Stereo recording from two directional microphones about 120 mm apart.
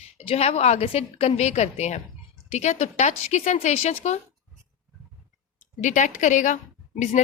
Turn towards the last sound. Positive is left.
turn(degrees=90)